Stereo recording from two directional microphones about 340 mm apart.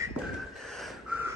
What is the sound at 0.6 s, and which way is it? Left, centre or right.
Snort, centre.